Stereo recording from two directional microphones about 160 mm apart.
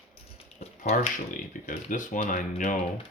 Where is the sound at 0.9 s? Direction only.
60° left (ahead or behind).